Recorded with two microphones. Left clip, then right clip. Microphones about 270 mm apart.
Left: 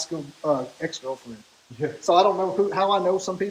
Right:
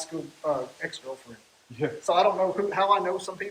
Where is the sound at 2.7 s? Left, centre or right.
Centre.